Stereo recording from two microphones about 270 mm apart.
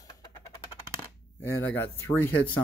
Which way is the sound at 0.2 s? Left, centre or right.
Centre.